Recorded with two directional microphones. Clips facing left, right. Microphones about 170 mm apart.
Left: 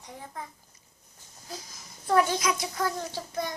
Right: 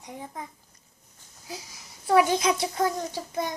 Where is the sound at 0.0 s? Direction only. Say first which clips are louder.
Right 3 dB; 15° right (ahead or behind).